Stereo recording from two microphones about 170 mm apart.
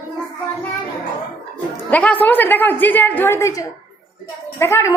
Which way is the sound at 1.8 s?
10° left (ahead or behind).